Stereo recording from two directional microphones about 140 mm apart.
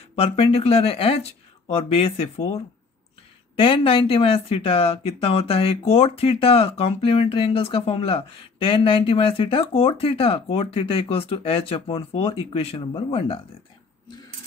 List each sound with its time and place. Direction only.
0.1 s speech: 45° left (ahead or behind)